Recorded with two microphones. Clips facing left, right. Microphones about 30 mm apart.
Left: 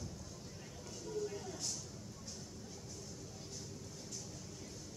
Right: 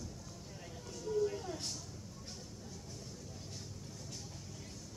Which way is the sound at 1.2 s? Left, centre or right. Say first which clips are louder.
Right 6 dB; right.